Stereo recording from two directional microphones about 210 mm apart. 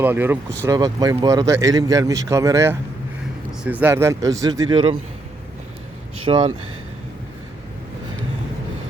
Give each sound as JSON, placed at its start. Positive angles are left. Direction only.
{"t": 0.0, "sound": "a man's voice", "side_deg": -10}
{"t": 6.2, "sound": "speech", "side_deg": -25}